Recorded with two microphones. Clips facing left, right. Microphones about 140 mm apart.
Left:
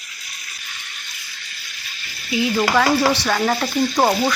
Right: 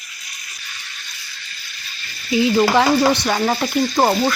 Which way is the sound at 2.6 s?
15° right (ahead or behind).